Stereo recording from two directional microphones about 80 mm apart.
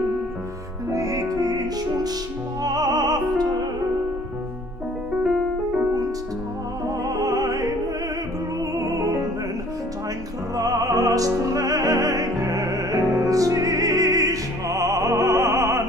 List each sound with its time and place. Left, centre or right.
0.9 s music: right
7.1 s music: right
10.5 s music: right